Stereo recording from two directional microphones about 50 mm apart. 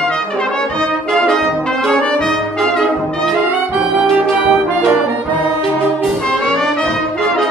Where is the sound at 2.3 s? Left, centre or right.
Centre.